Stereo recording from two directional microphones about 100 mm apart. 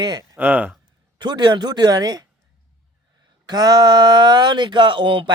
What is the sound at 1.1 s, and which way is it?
Speech, 50° right (ahead or behind).